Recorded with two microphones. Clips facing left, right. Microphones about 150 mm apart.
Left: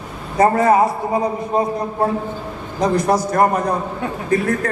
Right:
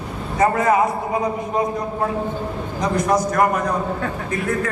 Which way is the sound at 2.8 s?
35° left (ahead or behind).